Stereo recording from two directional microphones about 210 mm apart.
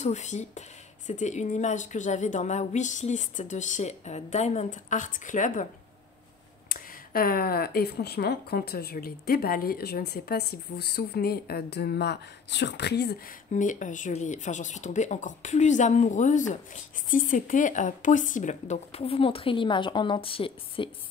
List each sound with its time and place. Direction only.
0.0 s speech: 35° left (ahead or behind)
6.7 s speech: 45° left (ahead or behind)
13.5 s speech: 35° left (ahead or behind)